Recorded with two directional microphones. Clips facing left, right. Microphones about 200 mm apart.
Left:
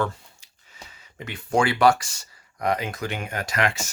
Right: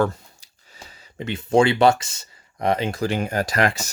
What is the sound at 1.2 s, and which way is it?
Speech, 25° right (ahead or behind).